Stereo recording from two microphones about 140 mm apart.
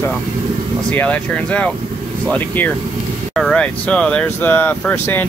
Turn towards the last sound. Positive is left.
turn(degrees=15)  # may be behind; listen again after turning